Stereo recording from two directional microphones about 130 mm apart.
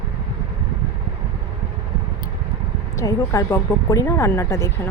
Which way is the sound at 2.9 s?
25° left (ahead or behind).